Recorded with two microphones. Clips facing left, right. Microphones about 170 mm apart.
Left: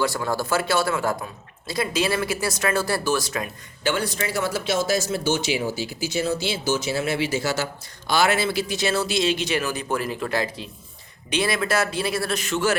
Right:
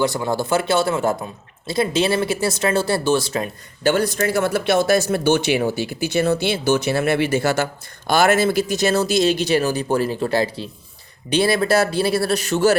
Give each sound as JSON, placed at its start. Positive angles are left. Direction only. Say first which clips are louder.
{"t": 0.0, "sound": "speech", "louder": "right 4 dB", "side_deg": -20}
{"t": 3.8, "sound": "speech", "louder": "right 7 dB", "side_deg": -45}